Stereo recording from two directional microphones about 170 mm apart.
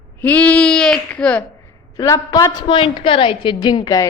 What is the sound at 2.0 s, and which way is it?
A woman's voice, 20° left (ahead or behind).